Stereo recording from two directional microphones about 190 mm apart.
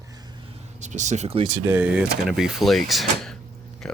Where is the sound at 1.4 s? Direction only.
15° right (ahead or behind); by 4.0 s 5° left (ahead or behind).